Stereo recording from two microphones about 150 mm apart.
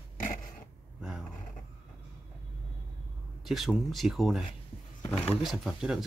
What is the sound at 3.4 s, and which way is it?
Speech, centre (ahead or behind).